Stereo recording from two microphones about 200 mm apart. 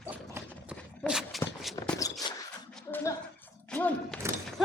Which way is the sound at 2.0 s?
20° left (ahead or behind).